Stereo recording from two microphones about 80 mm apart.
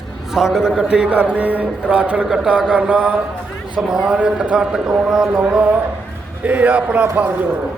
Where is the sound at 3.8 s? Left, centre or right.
Centre.